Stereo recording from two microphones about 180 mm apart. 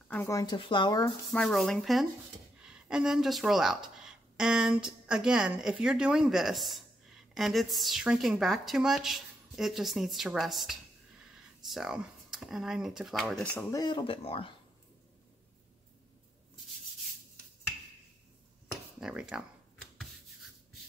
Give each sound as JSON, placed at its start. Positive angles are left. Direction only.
{"t": 0.1, "sound": "speech", "side_deg": 15}
{"t": 1.3, "sound": "a woman's voice", "side_deg": 0}
{"t": 13.7, "sound": "speech", "side_deg": 20}
{"t": 18.9, "sound": "a woman's voice", "side_deg": -5}